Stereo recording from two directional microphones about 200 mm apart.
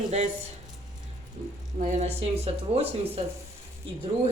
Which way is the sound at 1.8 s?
35° right (ahead or behind).